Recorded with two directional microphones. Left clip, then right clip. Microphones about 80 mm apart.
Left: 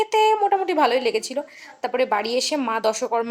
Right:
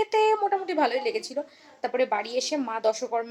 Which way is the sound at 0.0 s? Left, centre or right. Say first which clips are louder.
Left 4 dB; left.